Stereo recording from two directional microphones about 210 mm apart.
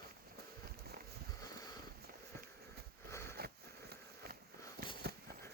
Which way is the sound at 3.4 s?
45° right (ahead or behind).